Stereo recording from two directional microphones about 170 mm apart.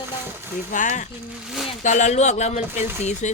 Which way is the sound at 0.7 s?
50° left (ahead or behind).